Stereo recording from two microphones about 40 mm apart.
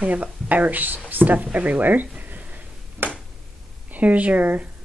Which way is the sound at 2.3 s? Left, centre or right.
Right.